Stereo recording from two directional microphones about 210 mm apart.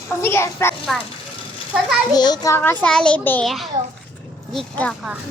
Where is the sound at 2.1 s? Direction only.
20° left (ahead or behind).